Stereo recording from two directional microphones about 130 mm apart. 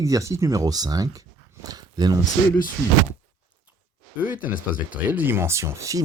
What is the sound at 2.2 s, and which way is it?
Speech, 90° left.